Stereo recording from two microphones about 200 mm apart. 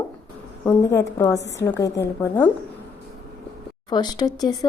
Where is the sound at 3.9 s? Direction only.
20° left (ahead or behind).